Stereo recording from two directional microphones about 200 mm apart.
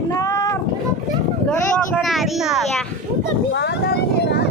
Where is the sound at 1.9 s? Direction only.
Centre (ahead or behind).